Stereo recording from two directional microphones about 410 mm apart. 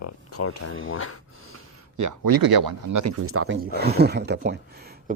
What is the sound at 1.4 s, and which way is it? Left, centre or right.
Gasp, right.